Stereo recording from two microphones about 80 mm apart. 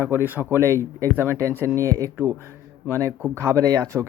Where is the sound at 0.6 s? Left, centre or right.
Right.